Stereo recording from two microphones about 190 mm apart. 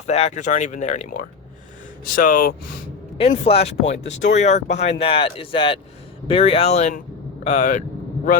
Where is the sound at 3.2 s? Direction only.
30° left (ahead or behind).